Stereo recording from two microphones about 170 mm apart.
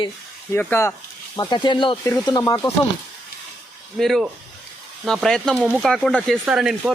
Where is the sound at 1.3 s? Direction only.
25° left (ahead or behind).